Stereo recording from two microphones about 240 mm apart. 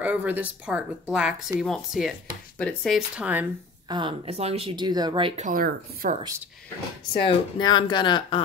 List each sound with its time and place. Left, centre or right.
0.0 s speech: centre
3.9 s speech: right
7.2 s speech: left